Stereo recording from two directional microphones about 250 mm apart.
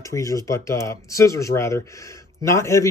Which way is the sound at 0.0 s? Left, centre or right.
Centre.